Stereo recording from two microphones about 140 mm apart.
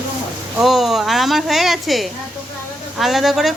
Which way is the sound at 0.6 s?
Centre (ahead or behind).